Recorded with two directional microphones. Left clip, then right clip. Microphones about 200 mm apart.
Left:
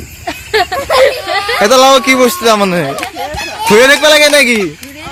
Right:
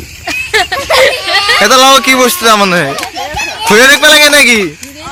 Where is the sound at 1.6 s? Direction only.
10° left (ahead or behind).